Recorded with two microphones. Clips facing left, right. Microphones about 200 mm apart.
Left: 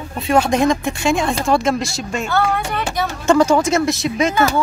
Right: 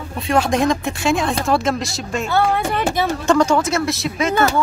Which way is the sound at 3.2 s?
5° left (ahead or behind).